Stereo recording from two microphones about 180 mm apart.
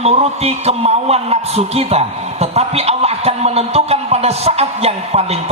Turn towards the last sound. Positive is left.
turn(degrees=-35)  # may be behind; listen again after turning